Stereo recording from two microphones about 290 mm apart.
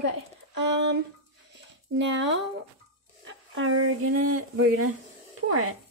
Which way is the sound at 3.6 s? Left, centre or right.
Right.